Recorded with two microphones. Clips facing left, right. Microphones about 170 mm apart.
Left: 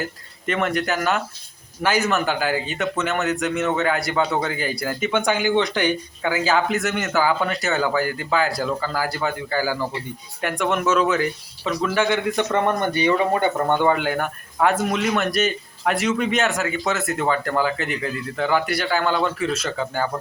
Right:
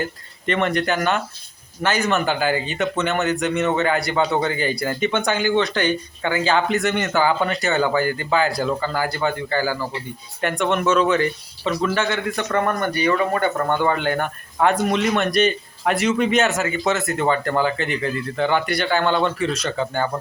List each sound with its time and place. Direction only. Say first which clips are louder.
0.0 s speech: right 2 dB; 5° left (ahead or behind)
12.0 s speech: left 3 dB; 15° left (ahead or behind)